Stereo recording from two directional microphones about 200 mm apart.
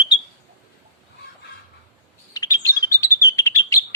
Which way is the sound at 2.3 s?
15° left (ahead or behind).